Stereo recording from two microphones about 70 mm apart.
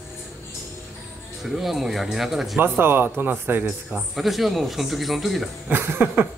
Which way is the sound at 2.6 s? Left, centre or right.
Right.